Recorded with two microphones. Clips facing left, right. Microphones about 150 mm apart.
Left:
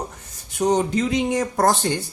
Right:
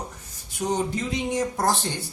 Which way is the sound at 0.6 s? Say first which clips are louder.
Left 6 dB; 80° left.